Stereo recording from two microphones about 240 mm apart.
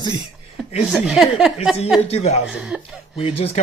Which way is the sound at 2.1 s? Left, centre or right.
Left.